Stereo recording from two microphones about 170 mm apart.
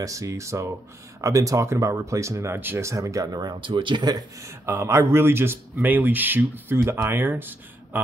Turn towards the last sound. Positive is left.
turn(degrees=-10)  # may be behind; listen again after turning